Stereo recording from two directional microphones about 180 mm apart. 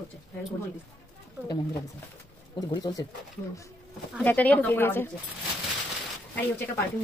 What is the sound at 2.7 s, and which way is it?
Speech, 20° left (ahead or behind).